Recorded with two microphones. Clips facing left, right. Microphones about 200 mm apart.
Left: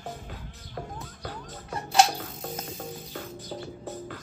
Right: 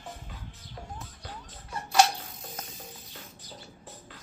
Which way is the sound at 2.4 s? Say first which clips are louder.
Left 8 dB; 65° left (ahead or behind).